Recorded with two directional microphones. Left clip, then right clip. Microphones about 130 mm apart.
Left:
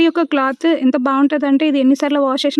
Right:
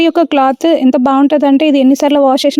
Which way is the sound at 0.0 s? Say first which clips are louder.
Right 5 dB; 30° right (ahead or behind).